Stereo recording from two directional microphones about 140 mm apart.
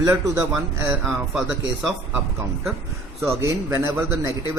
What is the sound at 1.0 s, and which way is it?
Speech, centre (ahead or behind).